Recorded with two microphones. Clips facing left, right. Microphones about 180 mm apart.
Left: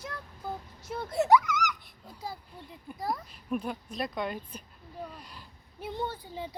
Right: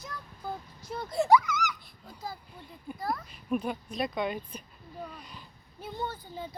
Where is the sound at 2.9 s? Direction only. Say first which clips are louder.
Even; 15° left (ahead or behind).